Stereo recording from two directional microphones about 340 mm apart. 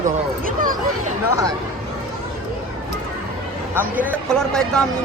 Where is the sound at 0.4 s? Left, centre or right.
Right.